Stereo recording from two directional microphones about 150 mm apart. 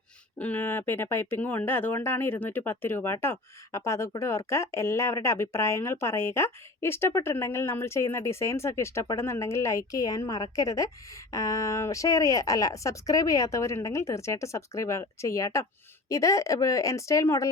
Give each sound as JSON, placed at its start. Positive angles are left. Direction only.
{"t": 0.3, "sound": "speech", "side_deg": 10}